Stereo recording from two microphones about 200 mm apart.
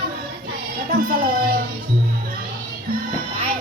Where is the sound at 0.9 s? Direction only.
45° right (ahead or behind).